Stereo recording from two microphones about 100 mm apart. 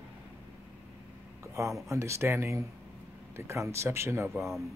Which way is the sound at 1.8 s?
30° right (ahead or behind).